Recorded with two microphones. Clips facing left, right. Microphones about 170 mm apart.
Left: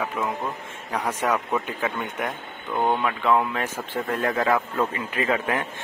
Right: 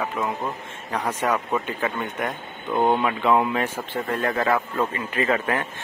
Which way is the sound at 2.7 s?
10° right (ahead or behind).